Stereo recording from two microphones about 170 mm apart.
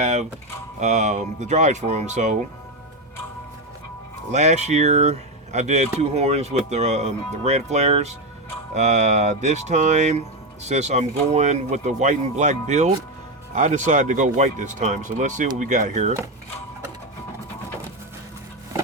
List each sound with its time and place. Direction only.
0.0 s speech: 40° right (ahead or behind)
4.3 s speech: 40° right (ahead or behind)